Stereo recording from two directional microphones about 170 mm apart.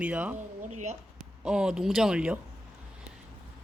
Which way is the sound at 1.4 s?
5° right (ahead or behind).